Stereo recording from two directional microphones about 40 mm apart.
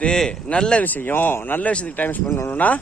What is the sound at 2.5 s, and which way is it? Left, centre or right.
Speech, left.